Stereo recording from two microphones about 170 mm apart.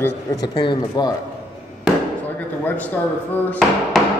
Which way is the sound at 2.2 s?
10° left (ahead or behind).